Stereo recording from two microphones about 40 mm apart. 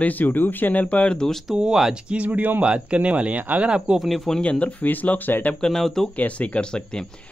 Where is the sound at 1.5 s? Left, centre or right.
Centre.